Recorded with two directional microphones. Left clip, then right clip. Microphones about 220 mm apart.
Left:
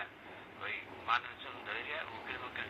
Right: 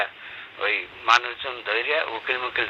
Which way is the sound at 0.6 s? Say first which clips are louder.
Right 17 dB; 50° right (ahead or behind).